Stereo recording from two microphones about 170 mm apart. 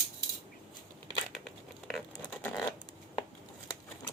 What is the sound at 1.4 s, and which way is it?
Crumpling, centre (ahead or behind).